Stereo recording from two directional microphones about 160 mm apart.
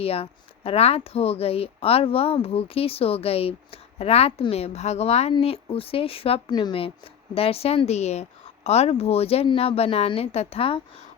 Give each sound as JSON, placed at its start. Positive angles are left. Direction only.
{"t": 0.0, "sound": "speech", "side_deg": 35}